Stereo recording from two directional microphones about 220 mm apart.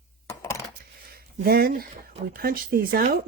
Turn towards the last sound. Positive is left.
turn(degrees=-40)  # may be behind; listen again after turning